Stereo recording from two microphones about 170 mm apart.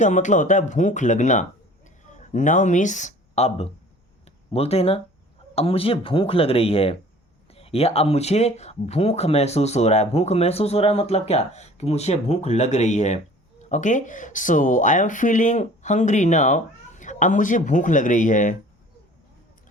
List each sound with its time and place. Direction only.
0.0 s speech: 45° left (ahead or behind)